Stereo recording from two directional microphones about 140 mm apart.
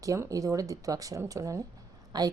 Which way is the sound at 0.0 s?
25° right (ahead or behind).